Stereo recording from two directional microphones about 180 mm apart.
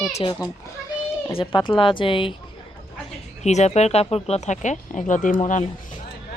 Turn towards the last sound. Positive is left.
turn(degrees=45)  # may be behind; listen again after turning